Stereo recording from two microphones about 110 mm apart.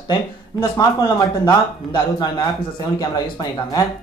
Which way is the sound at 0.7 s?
40° left (ahead or behind).